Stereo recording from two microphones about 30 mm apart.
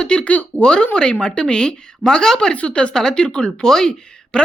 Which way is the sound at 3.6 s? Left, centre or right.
Centre.